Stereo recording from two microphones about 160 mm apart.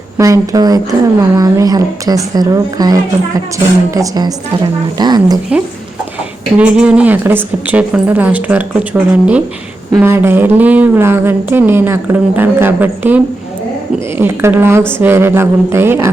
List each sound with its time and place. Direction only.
0.2 s a woman's voice: 20° right (ahead or behind)
6.6 s speech: 5° right (ahead or behind)